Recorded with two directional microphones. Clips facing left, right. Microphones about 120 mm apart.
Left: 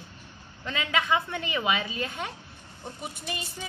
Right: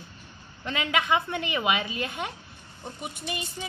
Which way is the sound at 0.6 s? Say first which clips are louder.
Right 1 dB; 20° right (ahead or behind).